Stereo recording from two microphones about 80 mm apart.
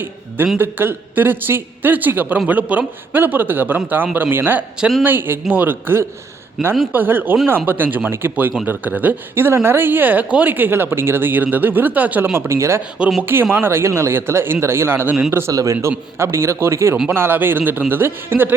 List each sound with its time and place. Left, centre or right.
0.6 s speech: right
4.8 s speech: centre
5.0 s speech: right
6.6 s speech: centre
6.9 s a man's voice: right
15.5 s a man's voice: right
15.9 s a man's voice: right